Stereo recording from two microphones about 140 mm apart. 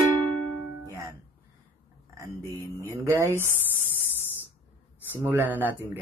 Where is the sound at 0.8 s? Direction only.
20° right (ahead or behind).